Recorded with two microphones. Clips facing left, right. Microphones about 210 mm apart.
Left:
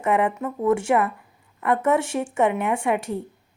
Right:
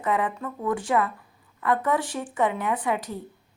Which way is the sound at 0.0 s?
25° left (ahead or behind).